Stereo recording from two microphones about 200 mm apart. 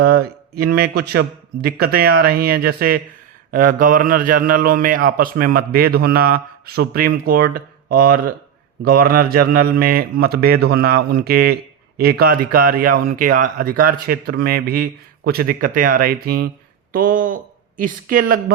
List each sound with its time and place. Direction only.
0.0 s speech: 50° right (ahead or behind)